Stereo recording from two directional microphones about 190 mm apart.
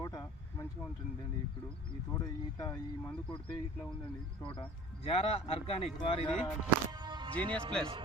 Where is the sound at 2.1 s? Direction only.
20° left (ahead or behind).